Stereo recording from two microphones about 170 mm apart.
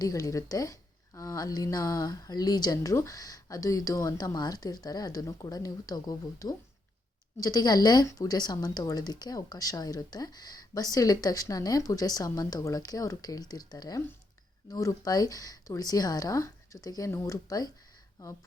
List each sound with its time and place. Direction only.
0.0 s a woman's voice: 20° left (ahead or behind)